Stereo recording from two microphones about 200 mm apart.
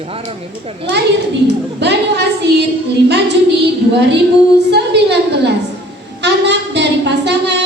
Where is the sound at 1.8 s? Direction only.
55° right (ahead or behind).